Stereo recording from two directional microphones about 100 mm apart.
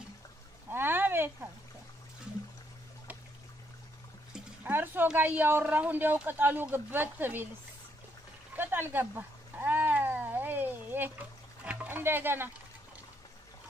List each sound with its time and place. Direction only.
0.7 s a sound: 20° right (ahead or behind)
4.6 s a man's voice: 20° right (ahead or behind)
8.5 s cat: 20° right (ahead or behind)